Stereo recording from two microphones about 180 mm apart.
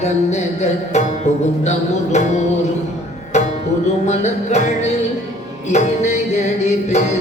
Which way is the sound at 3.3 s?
40° left (ahead or behind).